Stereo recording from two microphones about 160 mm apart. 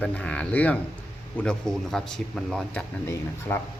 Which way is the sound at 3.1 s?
15° left (ahead or behind).